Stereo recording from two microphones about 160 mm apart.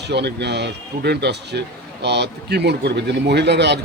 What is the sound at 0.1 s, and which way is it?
Speech, 90° right.